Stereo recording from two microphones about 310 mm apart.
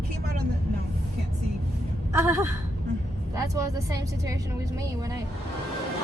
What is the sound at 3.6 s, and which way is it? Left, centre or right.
Speech, centre.